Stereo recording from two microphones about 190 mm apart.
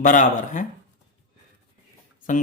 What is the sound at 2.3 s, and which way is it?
Speech, 40° left (ahead or behind).